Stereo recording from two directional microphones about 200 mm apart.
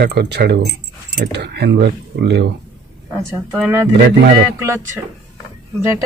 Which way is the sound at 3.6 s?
10° right (ahead or behind).